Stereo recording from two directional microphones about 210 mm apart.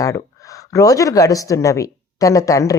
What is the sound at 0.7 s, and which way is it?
A woman's voice, 15° left (ahead or behind).